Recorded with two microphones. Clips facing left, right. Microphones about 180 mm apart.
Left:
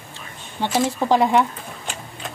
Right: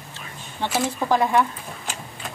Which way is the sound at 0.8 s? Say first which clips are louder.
Left 3 dB; 15° left (ahead or behind).